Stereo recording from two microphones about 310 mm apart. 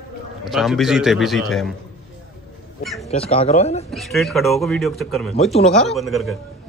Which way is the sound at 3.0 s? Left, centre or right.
Centre.